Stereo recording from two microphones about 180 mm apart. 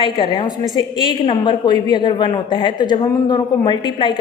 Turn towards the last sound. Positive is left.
turn(degrees=25)  # may be behind; listen again after turning